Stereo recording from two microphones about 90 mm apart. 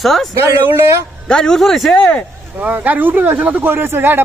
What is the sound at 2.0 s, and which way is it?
Speech, 15° left (ahead or behind).